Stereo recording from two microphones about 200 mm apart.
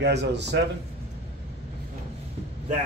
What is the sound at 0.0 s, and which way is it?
Speech, 60° right (ahead or behind).